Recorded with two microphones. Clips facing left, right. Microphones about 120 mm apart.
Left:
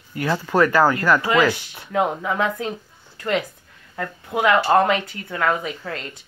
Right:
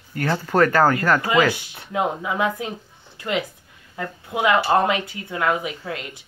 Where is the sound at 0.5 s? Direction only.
45° right (ahead or behind).